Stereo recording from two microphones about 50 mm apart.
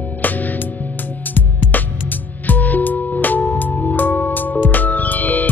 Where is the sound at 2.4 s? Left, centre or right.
Left.